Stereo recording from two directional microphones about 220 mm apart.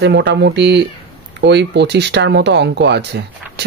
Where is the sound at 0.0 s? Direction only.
50° right (ahead or behind).